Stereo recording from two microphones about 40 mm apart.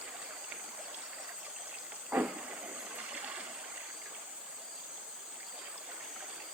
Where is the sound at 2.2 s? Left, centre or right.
Right.